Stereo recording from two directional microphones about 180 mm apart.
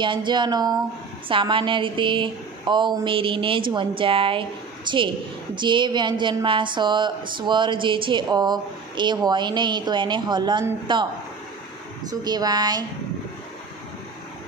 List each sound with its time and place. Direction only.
0.0 s a woman's voice: 25° right (ahead or behind)
12.1 s a woman's voice: 20° right (ahead or behind)